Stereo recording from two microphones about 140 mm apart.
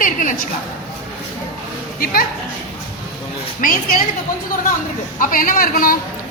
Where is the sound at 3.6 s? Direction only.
80° left.